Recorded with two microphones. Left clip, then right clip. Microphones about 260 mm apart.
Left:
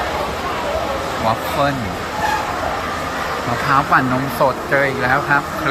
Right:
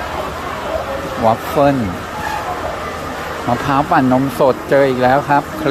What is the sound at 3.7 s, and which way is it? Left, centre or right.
Speech, right.